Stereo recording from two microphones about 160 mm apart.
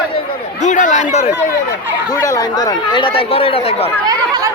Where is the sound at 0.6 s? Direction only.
50° left (ahead or behind).